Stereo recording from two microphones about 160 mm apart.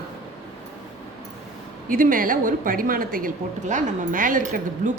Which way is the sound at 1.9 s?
60° right (ahead or behind).